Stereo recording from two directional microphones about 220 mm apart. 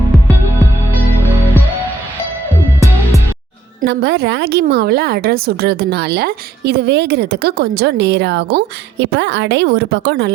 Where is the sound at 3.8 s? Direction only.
50° right (ahead or behind).